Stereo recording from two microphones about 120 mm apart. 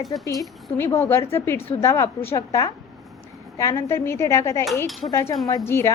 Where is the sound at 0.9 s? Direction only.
20° left (ahead or behind).